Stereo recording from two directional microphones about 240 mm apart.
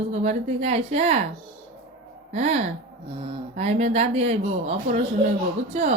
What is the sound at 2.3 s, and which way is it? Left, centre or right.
Speech, right.